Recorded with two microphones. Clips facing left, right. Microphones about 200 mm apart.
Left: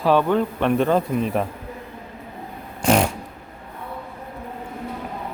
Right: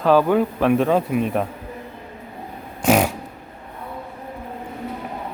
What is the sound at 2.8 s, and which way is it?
Fart, 5° right (ahead or behind).